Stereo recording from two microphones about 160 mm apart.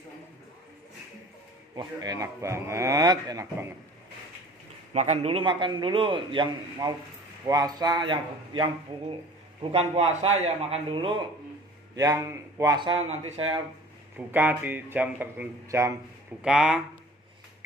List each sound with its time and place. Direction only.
1.7 s a man's voice: 25° right (ahead or behind)
4.9 s a man's voice: 45° right (ahead or behind)
11.9 s a man's voice: 20° right (ahead or behind)
13.1 s a man's voice: 40° right (ahead or behind)
14.2 s speech: 10° right (ahead or behind)
16.4 s speech: 5° right (ahead or behind)